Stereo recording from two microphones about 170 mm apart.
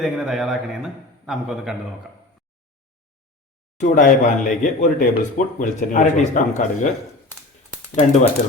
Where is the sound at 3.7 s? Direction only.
50° left (ahead or behind).